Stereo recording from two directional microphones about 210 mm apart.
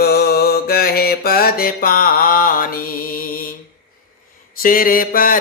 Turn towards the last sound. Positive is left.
turn(degrees=40)  # may be behind; listen again after turning